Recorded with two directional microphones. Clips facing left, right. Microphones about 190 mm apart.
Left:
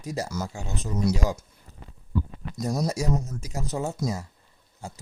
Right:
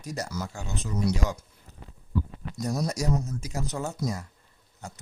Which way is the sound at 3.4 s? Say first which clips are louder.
Left 2 dB; 30° left (ahead or behind).